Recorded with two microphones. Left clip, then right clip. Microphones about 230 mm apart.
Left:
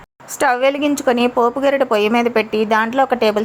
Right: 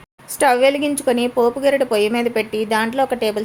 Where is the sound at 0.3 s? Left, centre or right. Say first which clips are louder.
Right 1 dB; centre.